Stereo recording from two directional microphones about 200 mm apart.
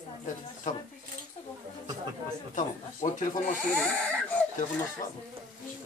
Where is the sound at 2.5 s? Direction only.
40° left (ahead or behind).